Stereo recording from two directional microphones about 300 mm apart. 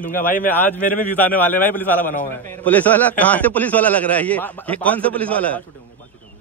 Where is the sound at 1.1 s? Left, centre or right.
Centre.